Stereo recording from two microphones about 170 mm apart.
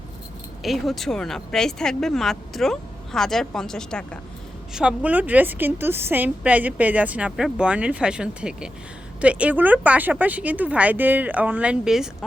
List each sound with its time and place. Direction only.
0.6 s a woman's voice: centre (ahead or behind)